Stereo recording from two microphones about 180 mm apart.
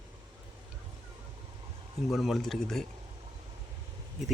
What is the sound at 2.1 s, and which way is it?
Speech, centre (ahead or behind).